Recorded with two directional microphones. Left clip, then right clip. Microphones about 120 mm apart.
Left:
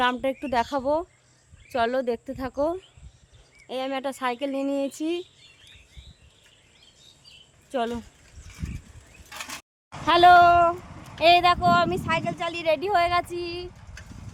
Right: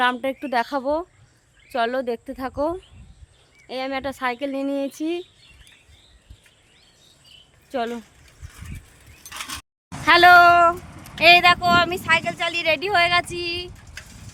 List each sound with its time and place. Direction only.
0.0 s speech: 5° right (ahead or behind)
7.7 s speech: 10° right (ahead or behind)
9.3 s a sound: 25° right (ahead or behind)
10.0 s speech: centre (ahead or behind)
10.8 s a sound: 30° left (ahead or behind)
11.2 s speech: centre (ahead or behind)